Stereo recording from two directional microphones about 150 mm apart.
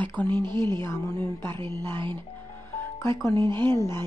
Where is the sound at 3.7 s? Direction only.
15° left (ahead or behind).